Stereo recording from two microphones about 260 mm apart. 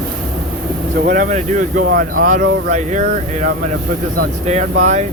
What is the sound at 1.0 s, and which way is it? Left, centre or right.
Speech, right.